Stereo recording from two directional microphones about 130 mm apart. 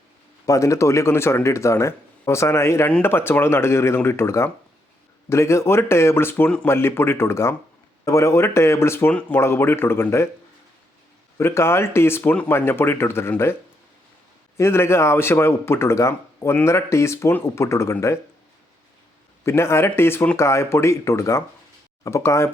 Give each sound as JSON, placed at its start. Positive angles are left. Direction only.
{"t": 0.4, "sound": "speech", "side_deg": 25}
{"t": 11.3, "sound": "speech", "side_deg": 20}
{"t": 14.6, "sound": "speech", "side_deg": 20}
{"t": 19.5, "sound": "speech", "side_deg": 20}